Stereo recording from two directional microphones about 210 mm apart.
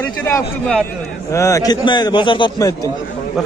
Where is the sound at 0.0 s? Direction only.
10° left (ahead or behind).